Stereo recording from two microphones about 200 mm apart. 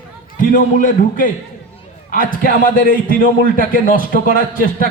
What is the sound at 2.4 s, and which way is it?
A man's voice, 40° left (ahead or behind).